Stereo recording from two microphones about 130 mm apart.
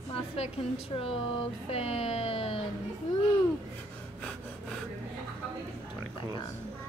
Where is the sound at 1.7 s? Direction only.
50° left (ahead or behind).